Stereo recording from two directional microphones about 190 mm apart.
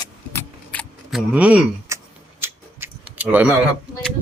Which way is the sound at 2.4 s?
10° right (ahead or behind).